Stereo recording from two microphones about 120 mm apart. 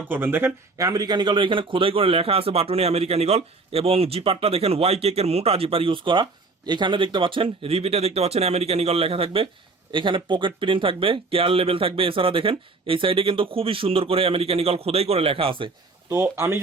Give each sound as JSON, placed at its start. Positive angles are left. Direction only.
{"t": 0.1, "sound": "speech", "side_deg": -15}
{"t": 16.0, "sound": "speech", "side_deg": -20}